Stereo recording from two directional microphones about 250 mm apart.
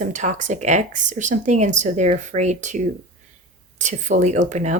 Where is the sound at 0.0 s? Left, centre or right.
Right.